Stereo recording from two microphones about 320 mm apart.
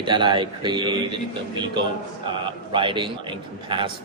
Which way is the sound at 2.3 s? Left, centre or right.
Centre.